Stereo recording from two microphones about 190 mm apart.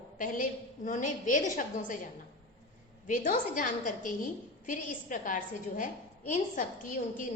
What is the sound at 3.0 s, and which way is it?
A woman's voice, 45° left (ahead or behind).